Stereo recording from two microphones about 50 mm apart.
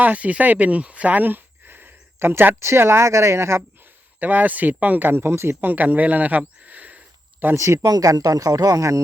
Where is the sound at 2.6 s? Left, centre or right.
Right.